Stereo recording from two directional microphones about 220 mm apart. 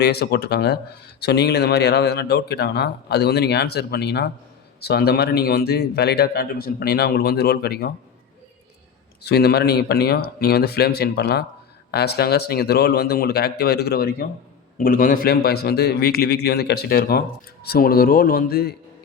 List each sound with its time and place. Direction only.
0.0 s speech: 45° left (ahead or behind)
9.2 s speech: 45° left (ahead or behind)